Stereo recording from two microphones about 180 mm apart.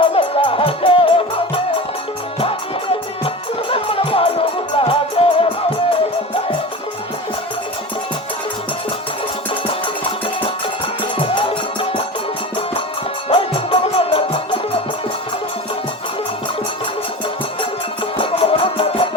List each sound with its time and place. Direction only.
0.0 s music: 30° left (ahead or behind)
3.2 s music: 30° left (ahead or behind)
11.2 s music: 30° left (ahead or behind)
13.2 s music: 30° left (ahead or behind)
18.2 s music: 30° left (ahead or behind)